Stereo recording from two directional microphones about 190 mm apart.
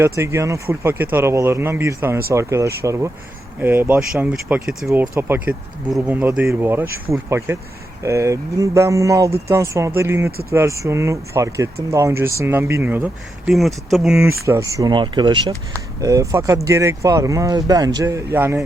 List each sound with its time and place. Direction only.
0.0 s speech: 15° right (ahead or behind)
14.4 s speech: 15° right (ahead or behind)